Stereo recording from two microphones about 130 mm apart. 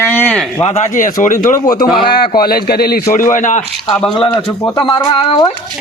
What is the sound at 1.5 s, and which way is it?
Speech, 30° left (ahead or behind).